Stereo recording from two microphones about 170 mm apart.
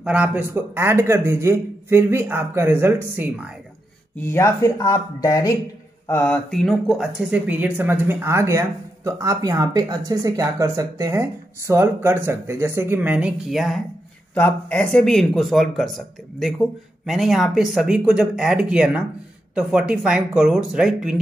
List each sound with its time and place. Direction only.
0.0 s speech: 5° right (ahead or behind)
4.3 s speech: 15° left (ahead or behind)
6.0 s speech: 10° left (ahead or behind)